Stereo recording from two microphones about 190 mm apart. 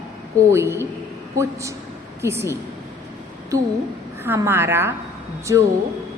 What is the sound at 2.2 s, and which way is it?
Speech, 15° right (ahead or behind).